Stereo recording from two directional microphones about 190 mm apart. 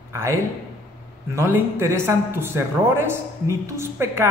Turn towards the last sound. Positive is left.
turn(degrees=-15)  # may be behind; listen again after turning